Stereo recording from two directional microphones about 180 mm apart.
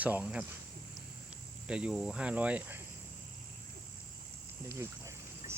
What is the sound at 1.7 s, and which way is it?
Speech, 5° right (ahead or behind).